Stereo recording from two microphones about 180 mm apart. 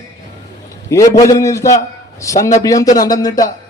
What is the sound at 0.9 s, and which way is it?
A man's voice, 20° left (ahead or behind).